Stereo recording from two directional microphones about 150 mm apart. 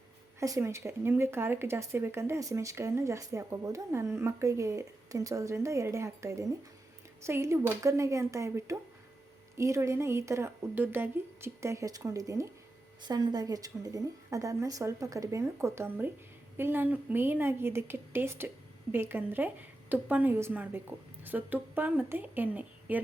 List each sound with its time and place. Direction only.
0.3 s a woman's voice: 20° right (ahead or behind)